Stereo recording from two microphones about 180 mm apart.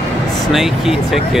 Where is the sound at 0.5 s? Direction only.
Centre (ahead or behind).